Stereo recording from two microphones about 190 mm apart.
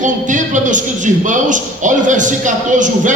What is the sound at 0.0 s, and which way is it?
A man's voice, 40° right (ahead or behind).